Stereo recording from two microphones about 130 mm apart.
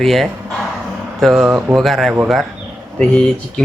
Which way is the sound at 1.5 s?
15° right (ahead or behind).